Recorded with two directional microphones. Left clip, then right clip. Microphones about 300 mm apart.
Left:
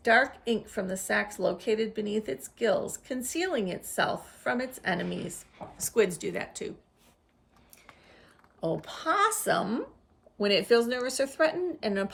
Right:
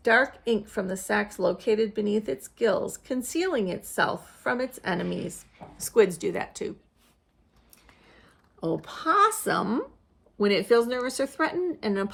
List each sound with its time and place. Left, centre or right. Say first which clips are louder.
0.0 s a woman's voice: right 2 dB; centre
8.8 s a woman's voice: right 5 dB; centre